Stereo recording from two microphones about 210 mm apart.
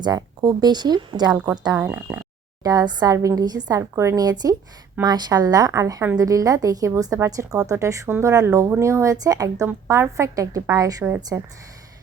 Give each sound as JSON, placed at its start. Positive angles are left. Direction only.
{"t": 0.0, "sound": "speech", "side_deg": -20}
{"t": 2.6, "sound": "a woman's voice", "side_deg": -20}